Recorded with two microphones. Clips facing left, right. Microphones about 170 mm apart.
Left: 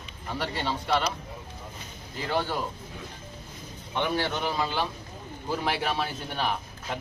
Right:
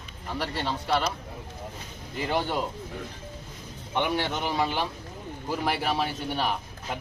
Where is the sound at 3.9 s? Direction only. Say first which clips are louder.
Right 1 dB; 15° right (ahead or behind).